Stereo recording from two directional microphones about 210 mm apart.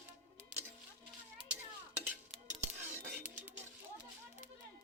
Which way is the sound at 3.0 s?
10° right (ahead or behind).